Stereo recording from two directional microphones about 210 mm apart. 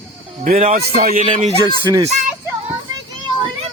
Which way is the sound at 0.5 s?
30° right (ahead or behind).